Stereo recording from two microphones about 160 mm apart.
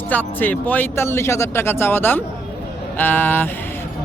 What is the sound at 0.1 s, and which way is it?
Speech, 10° left (ahead or behind).